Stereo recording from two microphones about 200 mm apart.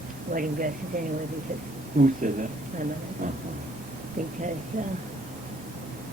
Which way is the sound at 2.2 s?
40° right (ahead or behind).